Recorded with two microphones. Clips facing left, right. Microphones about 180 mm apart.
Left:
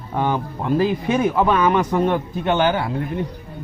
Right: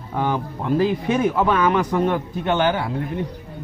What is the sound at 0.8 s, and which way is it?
A man's voice, 10° left (ahead or behind).